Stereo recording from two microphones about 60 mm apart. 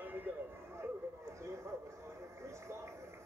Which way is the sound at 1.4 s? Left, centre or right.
Right.